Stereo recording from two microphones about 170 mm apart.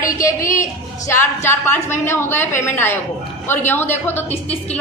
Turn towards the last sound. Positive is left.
turn(degrees=10)  # may be behind; listen again after turning